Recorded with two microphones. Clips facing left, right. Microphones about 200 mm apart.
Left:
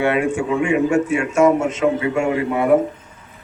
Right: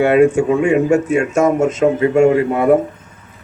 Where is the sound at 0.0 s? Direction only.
40° right (ahead or behind).